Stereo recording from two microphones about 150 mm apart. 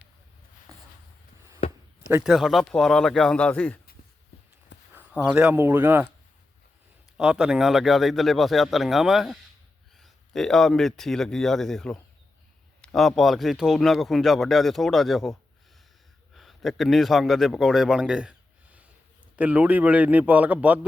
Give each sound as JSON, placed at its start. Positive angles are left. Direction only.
{"t": 0.7, "sound": "a sound", "side_deg": -20}
{"t": 2.2, "sound": "speech", "side_deg": 0}
{"t": 4.9, "sound": "speech", "side_deg": -10}
{"t": 7.2, "sound": "a man's voice", "side_deg": -5}